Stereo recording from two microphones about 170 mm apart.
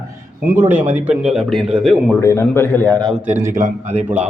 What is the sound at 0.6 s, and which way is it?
Speech, 15° right (ahead or behind).